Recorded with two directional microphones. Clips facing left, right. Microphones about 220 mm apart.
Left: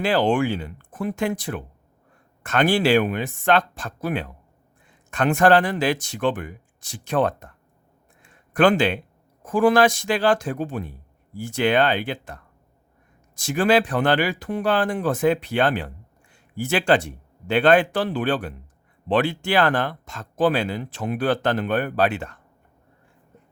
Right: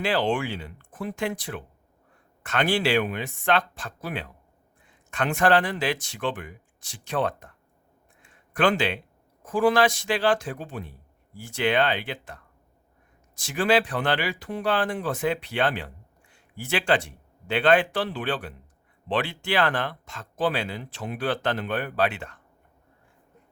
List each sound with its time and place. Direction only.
0.0 s speech: 45° left (ahead or behind)
8.5 s speech: 45° left (ahead or behind)
13.4 s speech: 45° left (ahead or behind)